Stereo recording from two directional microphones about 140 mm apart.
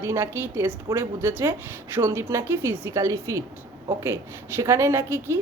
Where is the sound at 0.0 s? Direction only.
20° right (ahead or behind).